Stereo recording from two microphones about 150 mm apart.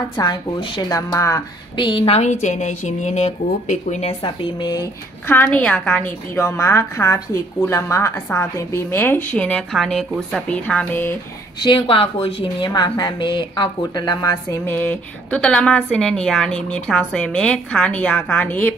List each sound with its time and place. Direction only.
0.2 s a woman's voice: 30° left (ahead or behind); by 4.1 s 55° left (ahead or behind)
4.2 s a woman's voice: 30° left (ahead or behind)
5.3 s a woman's voice: 10° left (ahead or behind)
11.6 s a woman's voice: 35° left (ahead or behind)
14.7 s a woman's voice: 10° left (ahead or behind)